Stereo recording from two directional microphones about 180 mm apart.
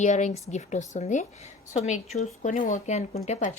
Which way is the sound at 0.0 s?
40° left (ahead or behind).